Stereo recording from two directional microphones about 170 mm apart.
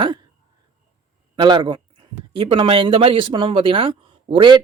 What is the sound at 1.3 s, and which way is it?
Speech, 25° right (ahead or behind).